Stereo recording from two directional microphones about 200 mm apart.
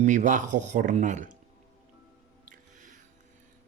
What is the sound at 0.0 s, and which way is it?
Speech, 40° right (ahead or behind).